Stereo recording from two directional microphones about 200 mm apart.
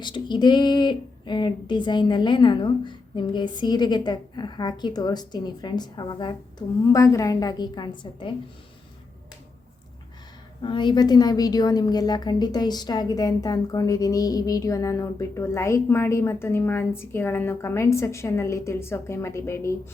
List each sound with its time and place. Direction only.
0.0 s speech: 20° left (ahead or behind)
10.6 s a woman's voice: 25° left (ahead or behind)